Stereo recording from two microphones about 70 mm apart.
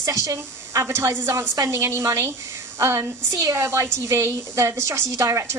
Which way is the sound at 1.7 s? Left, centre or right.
Right.